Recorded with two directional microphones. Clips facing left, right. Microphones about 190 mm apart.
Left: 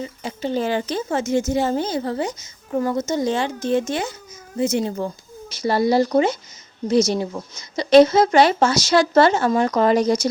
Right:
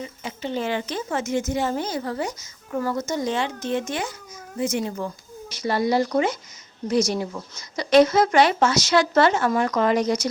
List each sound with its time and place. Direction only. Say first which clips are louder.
0.0 s a woman's voice: left 4 dB; 35° left (ahead or behind)